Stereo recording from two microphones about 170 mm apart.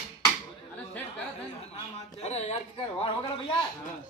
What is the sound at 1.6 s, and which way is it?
Speech, 35° left (ahead or behind).